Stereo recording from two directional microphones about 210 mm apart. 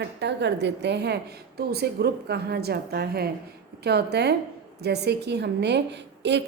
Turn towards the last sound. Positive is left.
turn(degrees=-55)  # may be behind; listen again after turning